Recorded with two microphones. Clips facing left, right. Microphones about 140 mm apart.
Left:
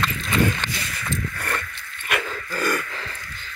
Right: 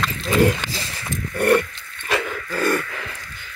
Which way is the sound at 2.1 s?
25° right (ahead or behind).